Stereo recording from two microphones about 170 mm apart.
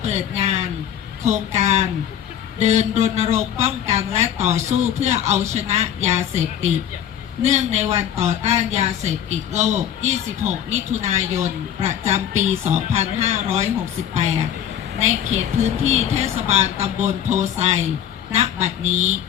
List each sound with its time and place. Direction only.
0.0 s a sound: 40° right (ahead or behind)
1.2 s speech: 40° right (ahead or behind)
15.0 s speech: 40° right (ahead or behind)